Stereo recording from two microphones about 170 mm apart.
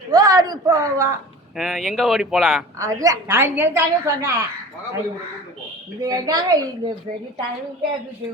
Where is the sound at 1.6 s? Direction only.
Centre (ahead or behind).